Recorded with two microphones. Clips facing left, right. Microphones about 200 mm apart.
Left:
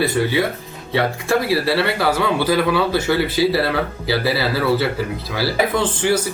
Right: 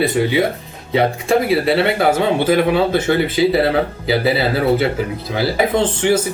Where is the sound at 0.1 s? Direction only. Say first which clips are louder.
Right 3 dB; 20° right (ahead or behind).